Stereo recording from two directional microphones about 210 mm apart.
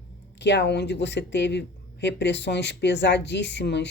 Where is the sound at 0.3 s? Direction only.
55° left (ahead or behind).